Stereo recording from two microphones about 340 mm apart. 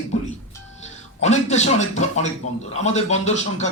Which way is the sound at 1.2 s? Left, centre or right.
Centre.